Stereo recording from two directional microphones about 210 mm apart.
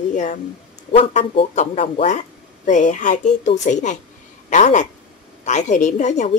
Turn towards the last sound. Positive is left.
turn(degrees=35)  # may be behind; listen again after turning